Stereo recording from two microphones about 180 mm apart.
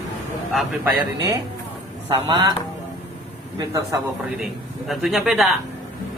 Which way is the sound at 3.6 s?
20° right (ahead or behind).